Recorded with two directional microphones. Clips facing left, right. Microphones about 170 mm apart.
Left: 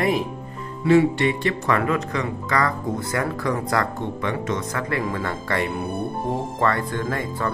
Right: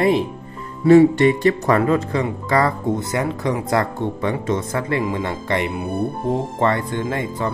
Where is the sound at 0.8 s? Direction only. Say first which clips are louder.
Right 6 dB; 40° right (ahead or behind).